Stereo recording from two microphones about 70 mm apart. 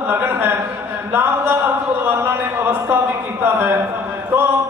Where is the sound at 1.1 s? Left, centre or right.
Right.